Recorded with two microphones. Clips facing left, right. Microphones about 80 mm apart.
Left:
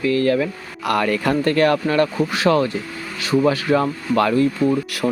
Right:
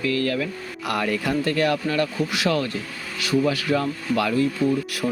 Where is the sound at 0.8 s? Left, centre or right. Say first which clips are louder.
Left 5 dB; left.